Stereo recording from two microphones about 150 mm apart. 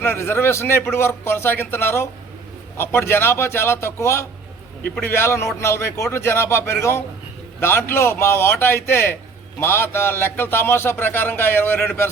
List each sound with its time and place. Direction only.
0.0 s a man's voice: 15° left (ahead or behind)